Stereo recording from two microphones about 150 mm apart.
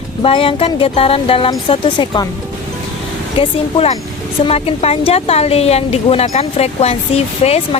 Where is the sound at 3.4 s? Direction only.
40° left (ahead or behind).